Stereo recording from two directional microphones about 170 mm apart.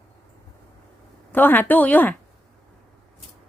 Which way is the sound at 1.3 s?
10° left (ahead or behind).